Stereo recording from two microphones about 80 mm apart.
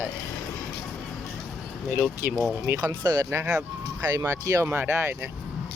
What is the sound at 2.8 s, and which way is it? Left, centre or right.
Speech, right.